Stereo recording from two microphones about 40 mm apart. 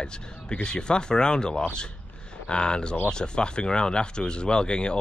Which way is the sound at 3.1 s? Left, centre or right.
Left.